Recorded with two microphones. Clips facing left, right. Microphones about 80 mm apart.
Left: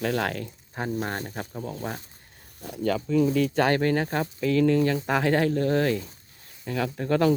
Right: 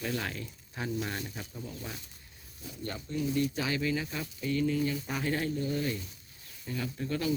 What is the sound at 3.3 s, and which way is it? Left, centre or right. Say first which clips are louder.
Speech: left 9 dB; left.